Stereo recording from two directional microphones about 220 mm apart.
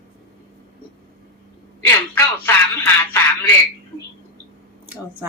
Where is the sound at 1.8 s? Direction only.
10° left (ahead or behind).